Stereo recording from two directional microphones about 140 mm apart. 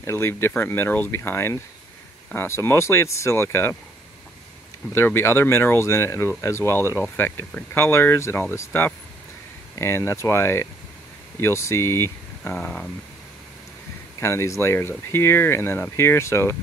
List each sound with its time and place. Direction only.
0.0 s speech: 20° left (ahead or behind)
4.9 s speech: 20° left (ahead or behind)
12.5 s speech: 5° left (ahead or behind)
14.2 s speech: 20° left (ahead or behind)